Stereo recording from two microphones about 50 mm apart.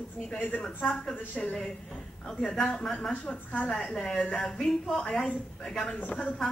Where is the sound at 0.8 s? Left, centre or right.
Centre.